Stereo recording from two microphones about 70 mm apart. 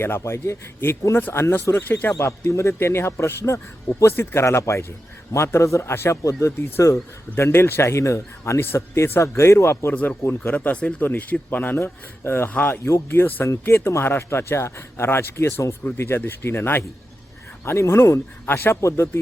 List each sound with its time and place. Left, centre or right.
0.0 s speech: left
1.9 s speech: left
2.1 s speech: left
5.9 s speech: left
6.2 s speech: left
8.6 s speech: left
9.9 s speech: left
12.8 s speech: left
18.8 s speech: left